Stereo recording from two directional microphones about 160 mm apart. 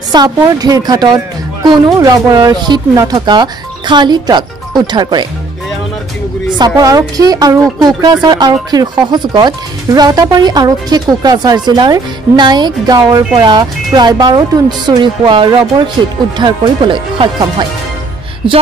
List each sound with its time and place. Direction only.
0.1 s speech: 25° right (ahead or behind)
6.6 s speech: 25° right (ahead or behind)